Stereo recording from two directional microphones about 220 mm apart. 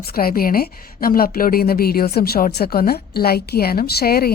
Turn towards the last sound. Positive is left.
turn(degrees=45)  # may be behind; listen again after turning